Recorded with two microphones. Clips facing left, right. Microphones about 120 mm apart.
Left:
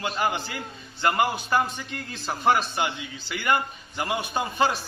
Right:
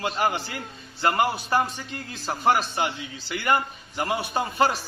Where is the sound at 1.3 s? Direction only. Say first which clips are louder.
Even; 40° right (ahead or behind).